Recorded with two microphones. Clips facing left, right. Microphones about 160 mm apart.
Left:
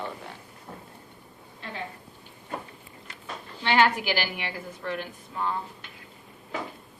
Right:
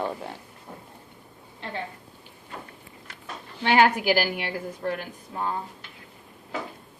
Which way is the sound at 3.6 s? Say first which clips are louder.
Right 3 dB; 50° right (ahead or behind).